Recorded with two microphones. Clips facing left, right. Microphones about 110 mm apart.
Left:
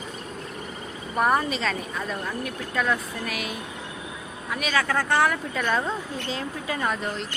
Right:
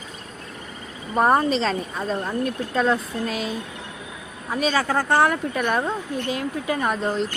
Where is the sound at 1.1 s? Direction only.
30° right (ahead or behind).